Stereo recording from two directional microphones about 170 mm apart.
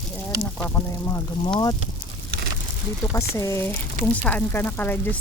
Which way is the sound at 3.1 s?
20° left (ahead or behind).